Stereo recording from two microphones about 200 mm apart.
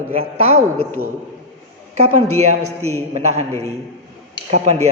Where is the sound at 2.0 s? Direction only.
90° right.